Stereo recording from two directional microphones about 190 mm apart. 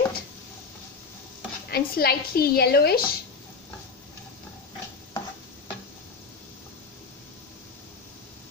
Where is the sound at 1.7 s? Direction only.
55° left (ahead or behind).